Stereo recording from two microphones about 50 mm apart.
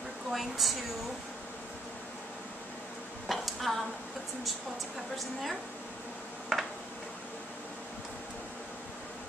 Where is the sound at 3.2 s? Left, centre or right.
Centre.